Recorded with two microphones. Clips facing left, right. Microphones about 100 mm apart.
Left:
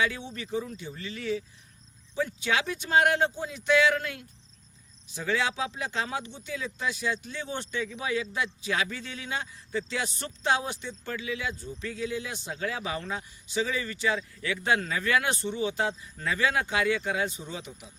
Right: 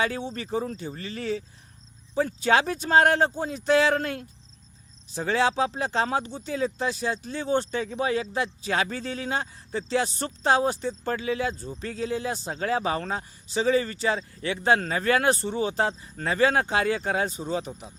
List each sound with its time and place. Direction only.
0.0 s speech: 35° right (ahead or behind)